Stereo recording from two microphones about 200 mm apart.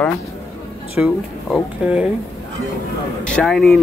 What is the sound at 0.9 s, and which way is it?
Speech, 5° right (ahead or behind).